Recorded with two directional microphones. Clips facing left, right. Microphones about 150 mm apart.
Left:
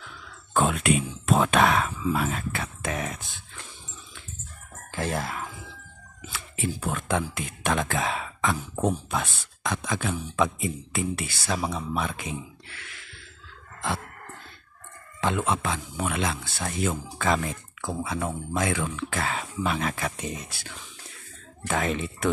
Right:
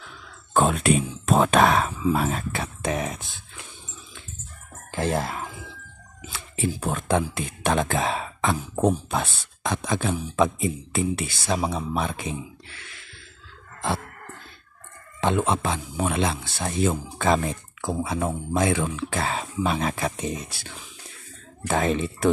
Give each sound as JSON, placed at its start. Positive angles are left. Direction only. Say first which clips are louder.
{"t": 0.5, "sound": "speech", "louder": "right 3 dB", "side_deg": -35}
{"t": 4.9, "sound": "speech", "louder": "right 4 dB", "side_deg": -30}
{"t": 15.1, "sound": "speech", "louder": "right 3 dB", "side_deg": -25}
{"t": 21.6, "sound": "speech", "louder": "right 4 dB", "side_deg": -30}